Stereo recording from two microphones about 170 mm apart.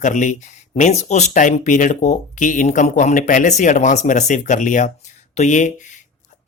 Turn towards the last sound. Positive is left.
turn(degrees=45)  # may be behind; listen again after turning